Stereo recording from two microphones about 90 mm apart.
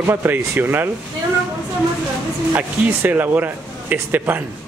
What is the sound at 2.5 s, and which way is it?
Speech, 20° right (ahead or behind).